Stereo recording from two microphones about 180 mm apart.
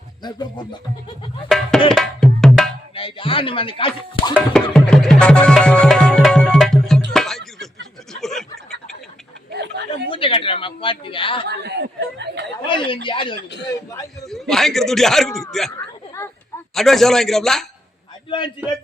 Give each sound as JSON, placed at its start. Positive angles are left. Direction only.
{"t": 0.2, "sound": "speech", "side_deg": 25}
{"t": 1.5, "sound": "a man's voice", "side_deg": 0}
{"t": 1.9, "sound": "tabla", "side_deg": 5}
{"t": 2.9, "sound": "speech", "side_deg": 30}
{"t": 4.5, "sound": "music", "side_deg": 5}
{"t": 8.1, "sound": "a sound", "side_deg": 0}
{"t": 9.5, "sound": "chatter", "side_deg": -65}
{"t": 10.1, "sound": "speech", "side_deg": 30}
{"t": 11.4, "sound": "speech", "side_deg": -70}
{"t": 12.6, "sound": "speech", "side_deg": 30}
{"t": 14.3, "sound": "a man's voice", "side_deg": 0}
{"t": 16.7, "sound": "a man's voice", "side_deg": 0}